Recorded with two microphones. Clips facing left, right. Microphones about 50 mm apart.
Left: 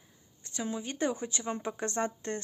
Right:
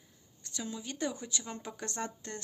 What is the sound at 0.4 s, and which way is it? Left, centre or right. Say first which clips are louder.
Speech: left 5 dB; left.